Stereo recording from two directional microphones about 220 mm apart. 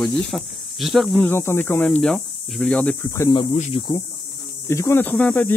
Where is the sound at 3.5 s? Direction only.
30° left (ahead or behind).